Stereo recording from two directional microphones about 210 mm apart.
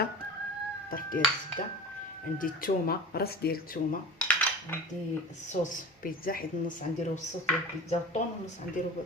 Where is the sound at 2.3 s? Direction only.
40° left (ahead or behind).